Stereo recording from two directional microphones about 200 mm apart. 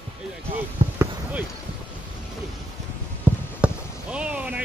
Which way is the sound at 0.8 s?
35° right (ahead or behind).